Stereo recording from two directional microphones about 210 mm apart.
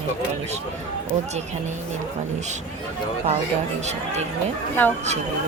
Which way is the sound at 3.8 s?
30° right (ahead or behind).